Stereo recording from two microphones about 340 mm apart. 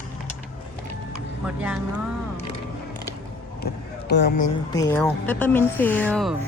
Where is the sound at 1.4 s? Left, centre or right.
Centre.